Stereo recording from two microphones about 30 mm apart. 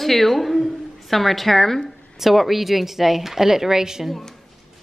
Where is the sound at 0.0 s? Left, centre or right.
Centre.